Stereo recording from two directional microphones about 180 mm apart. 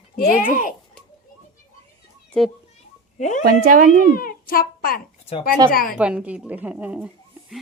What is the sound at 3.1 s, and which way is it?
Speech, 45° left (ahead or behind).